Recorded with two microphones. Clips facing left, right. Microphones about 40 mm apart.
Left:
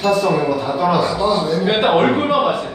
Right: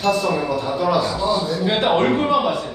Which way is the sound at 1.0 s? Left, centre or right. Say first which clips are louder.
Left 3 dB; left.